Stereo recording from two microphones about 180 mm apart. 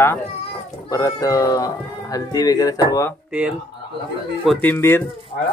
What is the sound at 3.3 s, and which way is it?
Speech, 5° right (ahead or behind).